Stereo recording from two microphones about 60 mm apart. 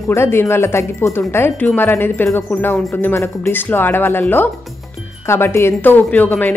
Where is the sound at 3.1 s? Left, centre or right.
Left.